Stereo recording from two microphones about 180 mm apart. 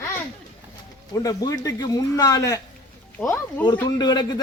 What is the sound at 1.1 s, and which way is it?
A man's voice, 20° left (ahead or behind).